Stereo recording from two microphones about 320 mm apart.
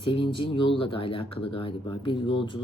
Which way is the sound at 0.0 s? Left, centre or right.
Centre.